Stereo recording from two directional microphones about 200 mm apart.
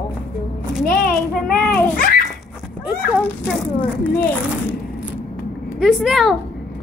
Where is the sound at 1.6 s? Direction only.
5° left (ahead or behind).